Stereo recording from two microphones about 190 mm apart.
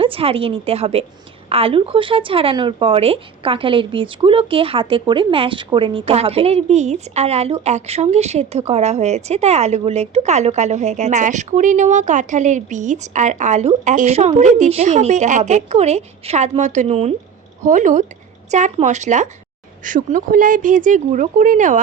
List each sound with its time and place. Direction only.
0.0 s a woman's voice: 30° right (ahead or behind)